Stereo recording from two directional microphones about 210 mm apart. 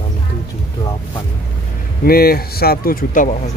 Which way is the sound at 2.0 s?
45° left (ahead or behind).